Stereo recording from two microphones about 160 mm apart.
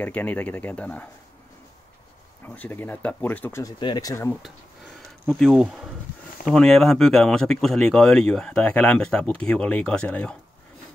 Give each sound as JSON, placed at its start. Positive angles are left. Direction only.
{"t": 0.0, "sound": "speech", "side_deg": 10}
{"t": 2.4, "sound": "speech", "side_deg": 10}
{"t": 5.2, "sound": "speech", "side_deg": 5}